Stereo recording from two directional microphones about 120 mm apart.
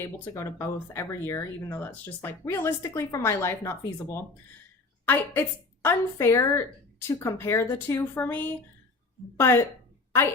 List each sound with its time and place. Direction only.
0.0 s speech: 25° left (ahead or behind)